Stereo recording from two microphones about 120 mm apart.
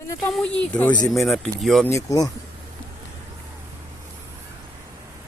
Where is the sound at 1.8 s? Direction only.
25° left (ahead or behind).